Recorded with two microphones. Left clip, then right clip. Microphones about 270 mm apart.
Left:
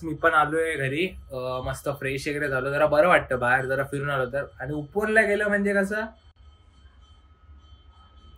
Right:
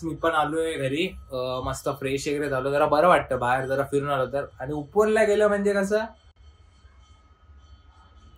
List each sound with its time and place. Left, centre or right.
0.0 s speech: centre